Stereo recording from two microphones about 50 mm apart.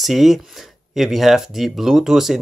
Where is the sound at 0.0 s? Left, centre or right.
Centre.